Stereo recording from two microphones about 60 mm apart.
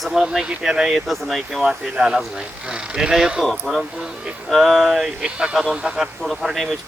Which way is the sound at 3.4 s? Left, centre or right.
Centre.